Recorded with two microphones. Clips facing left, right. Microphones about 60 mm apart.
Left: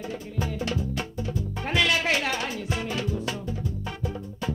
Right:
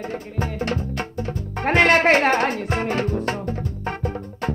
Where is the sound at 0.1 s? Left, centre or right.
Right.